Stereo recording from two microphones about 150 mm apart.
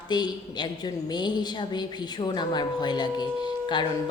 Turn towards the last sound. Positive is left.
turn(degrees=30)  # may be behind; listen again after turning